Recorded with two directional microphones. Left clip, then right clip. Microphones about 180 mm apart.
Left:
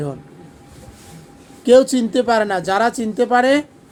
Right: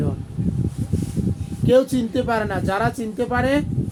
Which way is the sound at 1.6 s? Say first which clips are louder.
Left 5 dB; 70° left (ahead or behind).